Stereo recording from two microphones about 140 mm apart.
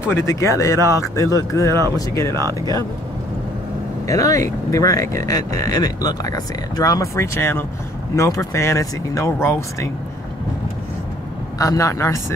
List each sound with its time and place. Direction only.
0.1 s speech: 20° left (ahead or behind)
2.3 s speech: 25° right (ahead or behind)
4.1 s speech: 25° left (ahead or behind)
11.5 s speech: 25° left (ahead or behind)